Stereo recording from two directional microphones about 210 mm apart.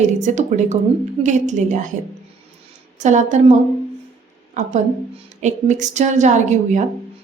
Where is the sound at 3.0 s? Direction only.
35° right (ahead or behind).